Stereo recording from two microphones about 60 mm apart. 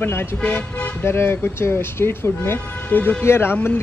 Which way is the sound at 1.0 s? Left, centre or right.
Left.